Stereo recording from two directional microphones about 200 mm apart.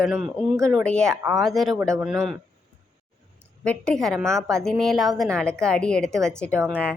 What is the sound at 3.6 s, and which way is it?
A woman's voice, 5° left (ahead or behind).